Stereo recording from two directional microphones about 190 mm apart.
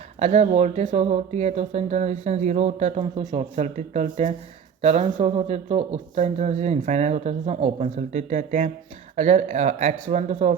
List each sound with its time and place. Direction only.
0.2 s speech: 40° right (ahead or behind)